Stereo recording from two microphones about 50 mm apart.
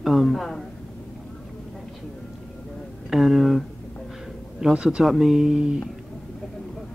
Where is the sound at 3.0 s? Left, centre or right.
Centre.